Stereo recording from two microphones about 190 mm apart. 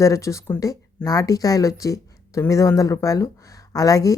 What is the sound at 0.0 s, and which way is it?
A woman's voice, 15° left (ahead or behind).